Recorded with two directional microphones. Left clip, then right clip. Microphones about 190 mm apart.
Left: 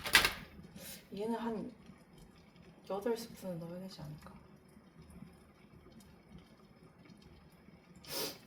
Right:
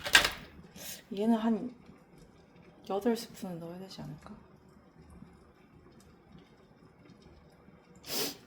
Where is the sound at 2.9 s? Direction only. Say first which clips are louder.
Right 5 dB; 60° right (ahead or behind).